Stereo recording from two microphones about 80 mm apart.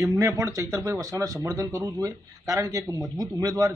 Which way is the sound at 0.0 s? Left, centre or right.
Right.